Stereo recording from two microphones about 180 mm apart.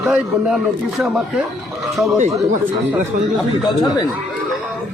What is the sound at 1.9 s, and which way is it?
Speech, centre (ahead or behind).